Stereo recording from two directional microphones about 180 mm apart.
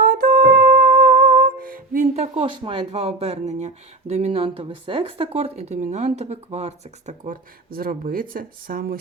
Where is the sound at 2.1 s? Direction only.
35° right (ahead or behind).